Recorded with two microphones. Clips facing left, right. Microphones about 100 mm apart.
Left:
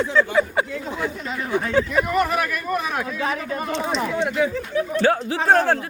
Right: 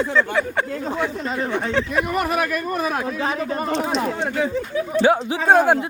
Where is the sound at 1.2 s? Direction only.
35° right (ahead or behind).